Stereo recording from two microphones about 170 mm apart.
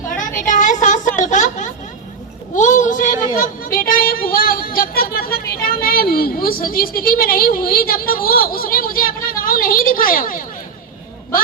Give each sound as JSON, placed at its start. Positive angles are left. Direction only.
{"t": 0.2, "sound": "a sound", "side_deg": 50}
{"t": 2.6, "sound": "child singing", "side_deg": 45}
{"t": 3.3, "sound": "speech", "side_deg": 55}